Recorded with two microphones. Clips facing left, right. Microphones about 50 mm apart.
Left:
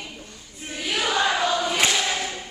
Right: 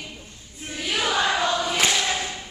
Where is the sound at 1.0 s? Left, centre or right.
Centre.